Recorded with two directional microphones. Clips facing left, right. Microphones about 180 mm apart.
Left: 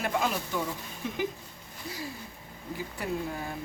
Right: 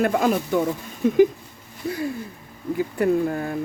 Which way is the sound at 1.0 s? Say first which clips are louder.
Right 16 dB; 50° right (ahead or behind).